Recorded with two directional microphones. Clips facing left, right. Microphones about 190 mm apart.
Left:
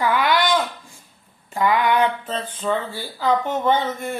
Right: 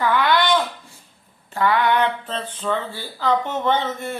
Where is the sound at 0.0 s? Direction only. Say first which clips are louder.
Even; 10° left (ahead or behind).